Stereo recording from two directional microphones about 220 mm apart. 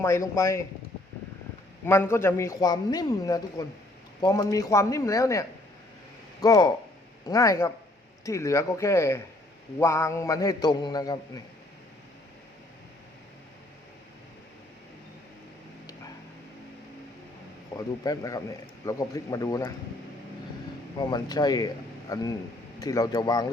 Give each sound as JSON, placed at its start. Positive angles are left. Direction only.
{"t": 0.0, "sound": "speech", "side_deg": 15}
{"t": 1.9, "sound": "speech", "side_deg": 10}
{"t": 17.7, "sound": "speech", "side_deg": 15}
{"t": 21.0, "sound": "speech", "side_deg": 20}